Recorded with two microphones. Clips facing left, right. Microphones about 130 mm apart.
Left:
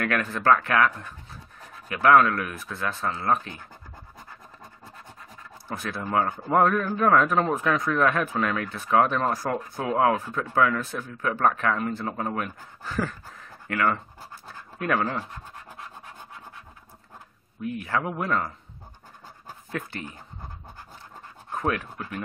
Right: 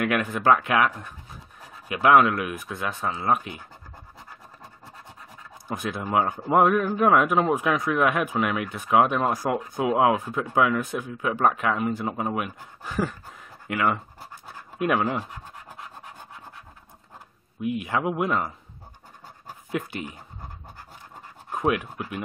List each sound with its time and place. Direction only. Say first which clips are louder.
0.0 s a man's voice: right 2 dB; 15° right (ahead or behind)
5.7 s a man's voice: right 2 dB; 15° right (ahead or behind)
17.6 s a man's voice: right 2 dB; 15° right (ahead or behind)
19.4 s pant: right 4 dB; 15° right (ahead or behind)
21.5 s speech: right 3 dB; 15° right (ahead or behind)